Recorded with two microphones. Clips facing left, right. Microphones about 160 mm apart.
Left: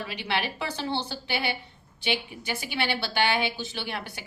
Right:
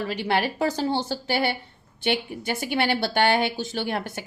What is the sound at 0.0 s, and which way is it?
Speech, 45° right (ahead or behind).